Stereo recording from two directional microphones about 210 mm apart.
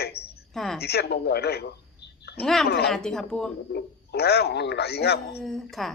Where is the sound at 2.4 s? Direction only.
5° left (ahead or behind).